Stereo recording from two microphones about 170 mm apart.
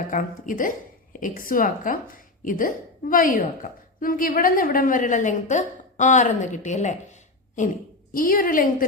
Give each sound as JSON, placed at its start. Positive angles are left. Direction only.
{"t": 0.1, "sound": "a woman's voice", "side_deg": 50}